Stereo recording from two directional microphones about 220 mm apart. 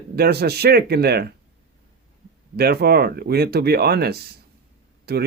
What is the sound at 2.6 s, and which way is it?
Speech, 45° right (ahead or behind).